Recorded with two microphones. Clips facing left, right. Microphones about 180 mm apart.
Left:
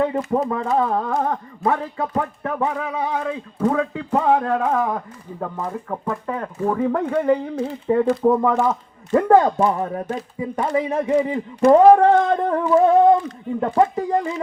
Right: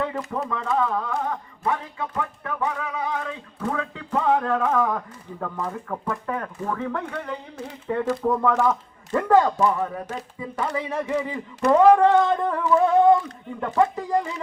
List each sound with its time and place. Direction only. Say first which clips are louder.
0.0 s speech: left 7 dB; 30° left (ahead or behind)
6.8 s speech: left 11 dB; 30° left (ahead or behind)